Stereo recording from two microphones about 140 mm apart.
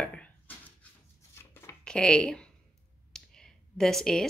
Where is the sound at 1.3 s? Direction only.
15° left (ahead or behind).